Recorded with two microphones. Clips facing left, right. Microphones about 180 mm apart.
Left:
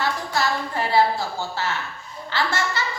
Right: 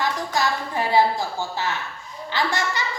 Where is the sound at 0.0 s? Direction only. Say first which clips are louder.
Right 1 dB; 15° right (ahead or behind).